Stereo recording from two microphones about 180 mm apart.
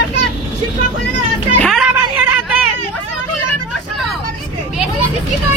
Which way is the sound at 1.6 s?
Centre (ahead or behind).